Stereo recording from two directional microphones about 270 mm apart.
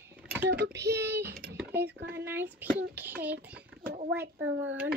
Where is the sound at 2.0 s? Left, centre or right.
Right.